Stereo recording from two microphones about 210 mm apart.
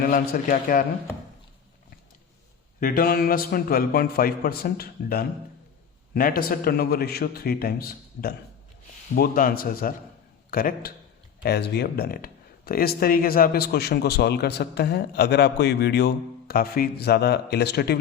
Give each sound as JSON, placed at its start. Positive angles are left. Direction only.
{"t": 0.0, "sound": "a man's voice", "side_deg": 40}
{"t": 2.8, "sound": "speech", "side_deg": 45}